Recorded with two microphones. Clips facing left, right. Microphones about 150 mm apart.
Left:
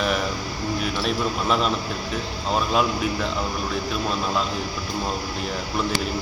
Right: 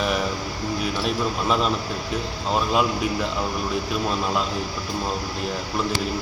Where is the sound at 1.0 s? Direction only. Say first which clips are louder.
Even; centre (ahead or behind).